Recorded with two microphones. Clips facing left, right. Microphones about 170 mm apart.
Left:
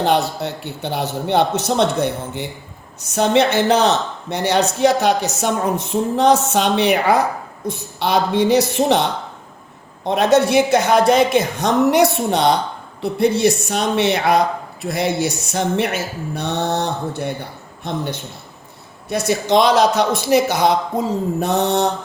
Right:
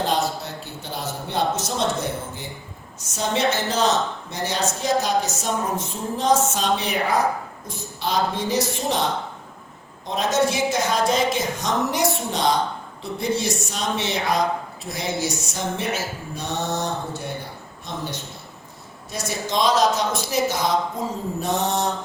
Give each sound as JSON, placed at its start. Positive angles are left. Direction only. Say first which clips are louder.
{"t": 0.0, "sound": "a man's voice", "louder": "left 6 dB", "side_deg": 65}
{"t": 19.0, "sound": "a man's voice", "louder": "left 9 dB", "side_deg": 65}